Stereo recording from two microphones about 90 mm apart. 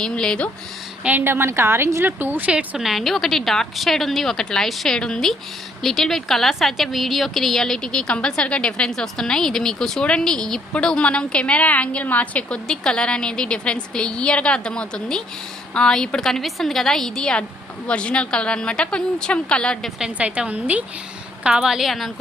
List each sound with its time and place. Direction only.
0.0 s a woman's voice: 10° left (ahead or behind)
1.0 s a woman's voice: 20° right (ahead or behind)
2.7 s a woman's voice: centre (ahead or behind)
20.0 s a woman's voice: 15° right (ahead or behind)